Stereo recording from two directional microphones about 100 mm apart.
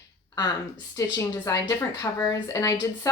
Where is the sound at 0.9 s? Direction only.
30° left (ahead or behind).